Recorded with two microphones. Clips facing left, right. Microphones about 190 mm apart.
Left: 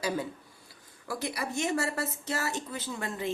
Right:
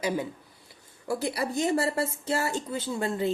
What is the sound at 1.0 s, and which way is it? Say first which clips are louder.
A woman's voice: right 5 dB; 30° right (ahead or behind).